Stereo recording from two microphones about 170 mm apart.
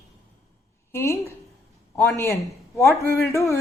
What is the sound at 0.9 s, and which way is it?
A man's voice, 15° left (ahead or behind).